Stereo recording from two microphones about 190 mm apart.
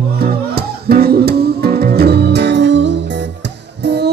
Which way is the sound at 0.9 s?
55° right (ahead or behind).